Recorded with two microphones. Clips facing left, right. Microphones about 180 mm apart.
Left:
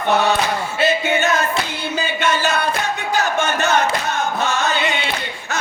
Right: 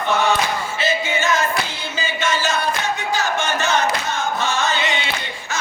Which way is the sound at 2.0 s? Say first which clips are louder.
Left 2 dB; 60° left (ahead or behind).